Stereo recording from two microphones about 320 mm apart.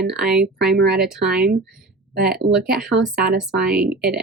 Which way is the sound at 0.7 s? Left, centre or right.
Right.